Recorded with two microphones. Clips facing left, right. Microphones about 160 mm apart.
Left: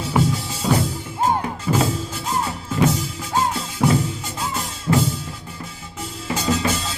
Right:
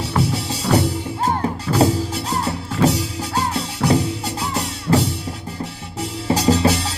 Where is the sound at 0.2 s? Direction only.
70° right (ahead or behind).